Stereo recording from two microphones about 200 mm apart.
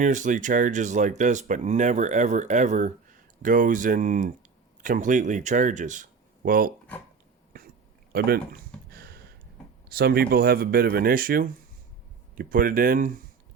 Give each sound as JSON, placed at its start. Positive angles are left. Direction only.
{"t": 0.0, "sound": "speech", "side_deg": -40}
{"t": 8.1, "sound": "a sound", "side_deg": -50}
{"t": 9.9, "sound": "speech", "side_deg": -50}